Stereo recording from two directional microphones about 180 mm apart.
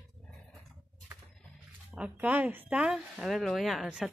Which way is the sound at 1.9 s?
10° right (ahead or behind).